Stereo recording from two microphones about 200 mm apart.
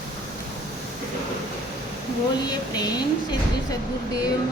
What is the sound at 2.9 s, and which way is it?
Speech, 20° left (ahead or behind).